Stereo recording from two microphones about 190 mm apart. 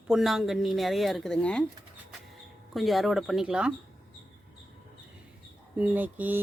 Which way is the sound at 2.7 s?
Centre (ahead or behind).